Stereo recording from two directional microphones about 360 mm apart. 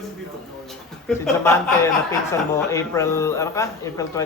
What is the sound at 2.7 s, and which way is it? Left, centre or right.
A man's voice, centre.